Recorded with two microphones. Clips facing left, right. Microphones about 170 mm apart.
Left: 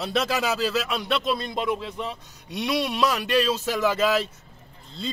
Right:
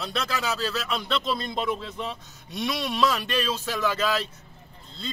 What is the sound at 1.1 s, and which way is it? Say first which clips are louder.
Speech: left 3 dB; 10° left (ahead or behind).